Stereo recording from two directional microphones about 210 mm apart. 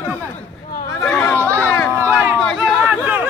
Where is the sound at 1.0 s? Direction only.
5° left (ahead or behind).